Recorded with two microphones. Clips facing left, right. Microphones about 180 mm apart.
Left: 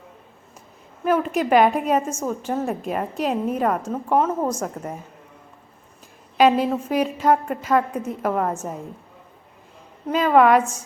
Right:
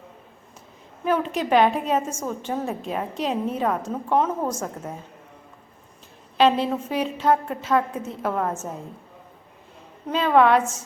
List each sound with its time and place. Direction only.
1.0 s a woman's voice: 5° left (ahead or behind)
6.3 s a woman's voice: 10° left (ahead or behind)
10.1 s a woman's voice: 10° left (ahead or behind)